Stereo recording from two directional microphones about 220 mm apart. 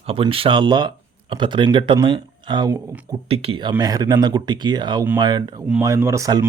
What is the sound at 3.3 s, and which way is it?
Speech, 25° right (ahead or behind).